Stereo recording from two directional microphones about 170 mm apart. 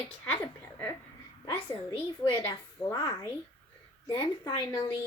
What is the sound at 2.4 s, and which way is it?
Speech, 15° left (ahead or behind).